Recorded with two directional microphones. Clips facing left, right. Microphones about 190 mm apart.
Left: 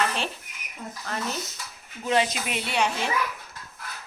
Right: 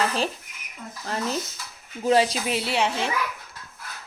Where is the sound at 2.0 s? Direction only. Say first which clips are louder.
Right 4 dB; 35° right (ahead or behind).